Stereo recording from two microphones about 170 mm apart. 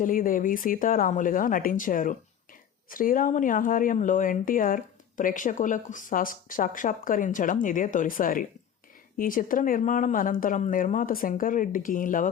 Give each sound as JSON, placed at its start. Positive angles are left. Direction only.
{"t": 0.0, "sound": "speech", "side_deg": 55}